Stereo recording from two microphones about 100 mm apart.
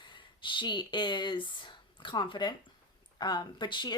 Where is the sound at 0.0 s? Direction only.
55° left (ahead or behind).